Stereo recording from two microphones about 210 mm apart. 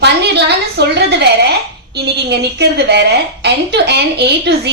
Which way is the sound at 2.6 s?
55° right (ahead or behind).